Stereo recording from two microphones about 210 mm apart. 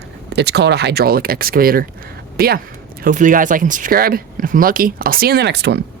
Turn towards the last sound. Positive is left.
turn(degrees=-55)  # may be behind; listen again after turning